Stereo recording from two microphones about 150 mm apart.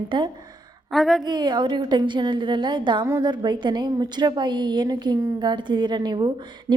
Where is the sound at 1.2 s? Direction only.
30° right (ahead or behind).